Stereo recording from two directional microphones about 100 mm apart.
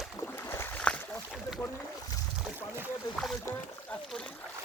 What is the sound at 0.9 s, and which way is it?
Boat, 10° left (ahead or behind).